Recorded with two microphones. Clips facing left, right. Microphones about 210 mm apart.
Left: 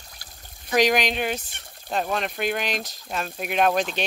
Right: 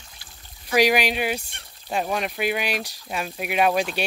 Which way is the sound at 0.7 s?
10° right (ahead or behind).